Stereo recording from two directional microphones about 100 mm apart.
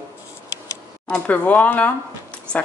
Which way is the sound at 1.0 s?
15° left (ahead or behind).